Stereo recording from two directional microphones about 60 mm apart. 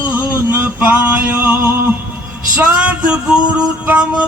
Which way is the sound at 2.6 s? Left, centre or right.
Right.